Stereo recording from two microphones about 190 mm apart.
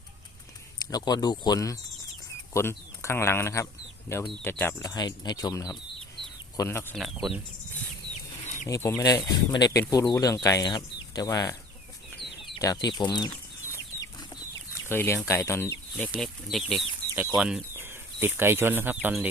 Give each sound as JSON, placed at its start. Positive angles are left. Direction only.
{"t": 0.9, "sound": "speech", "side_deg": 20}
{"t": 6.9, "sound": "speech", "side_deg": 0}
{"t": 8.6, "sound": "speech", "side_deg": 15}
{"t": 12.5, "sound": "chicken", "side_deg": 20}
{"t": 14.8, "sound": "speech", "side_deg": 10}
{"t": 16.1, "sound": "speech", "side_deg": 0}